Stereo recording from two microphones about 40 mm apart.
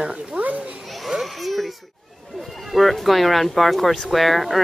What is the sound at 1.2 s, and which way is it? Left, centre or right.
Baby cry, centre.